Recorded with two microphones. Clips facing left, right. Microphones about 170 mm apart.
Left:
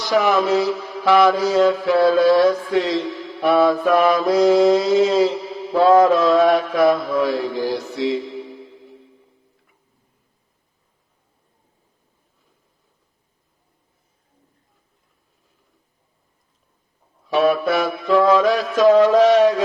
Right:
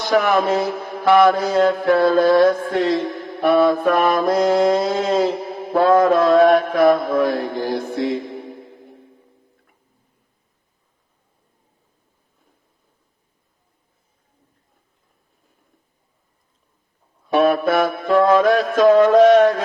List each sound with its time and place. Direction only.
0.0 s mantra: 55° right (ahead or behind)
17.3 s mantra: 50° right (ahead or behind)